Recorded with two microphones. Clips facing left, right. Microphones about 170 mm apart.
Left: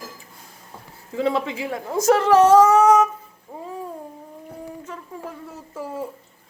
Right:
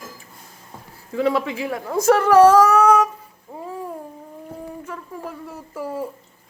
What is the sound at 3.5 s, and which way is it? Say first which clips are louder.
Babbling: right 1 dB; 5° right (ahead or behind).